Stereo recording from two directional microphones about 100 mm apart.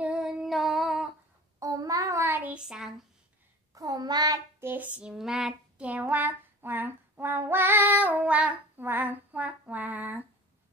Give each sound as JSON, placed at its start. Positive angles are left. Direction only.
{"t": 0.0, "sound": "female singing", "side_deg": -10}
{"t": 1.6, "sound": "child singing", "side_deg": -35}
{"t": 2.6, "sound": "a child's voice", "side_deg": -5}
{"t": 3.7, "sound": "child singing", "side_deg": -40}
{"t": 4.6, "sound": "child singing", "side_deg": -20}